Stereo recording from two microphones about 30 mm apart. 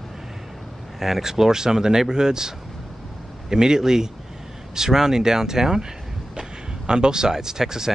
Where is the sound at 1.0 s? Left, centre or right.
Centre.